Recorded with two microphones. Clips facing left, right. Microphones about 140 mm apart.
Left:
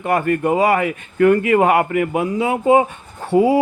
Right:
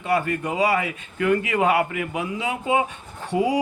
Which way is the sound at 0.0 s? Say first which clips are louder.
Left 6 dB; 50° left (ahead or behind).